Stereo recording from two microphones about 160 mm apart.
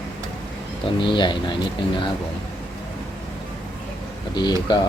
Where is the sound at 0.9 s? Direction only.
30° left (ahead or behind).